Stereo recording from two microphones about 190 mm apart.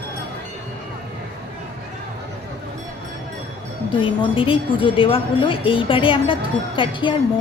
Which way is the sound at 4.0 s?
25° left (ahead or behind).